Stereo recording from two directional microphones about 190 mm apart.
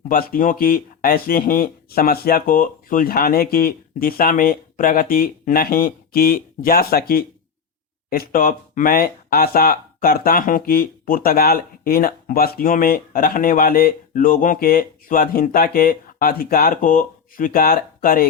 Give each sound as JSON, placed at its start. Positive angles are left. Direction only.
{"t": 0.1, "sound": "speech", "side_deg": 50}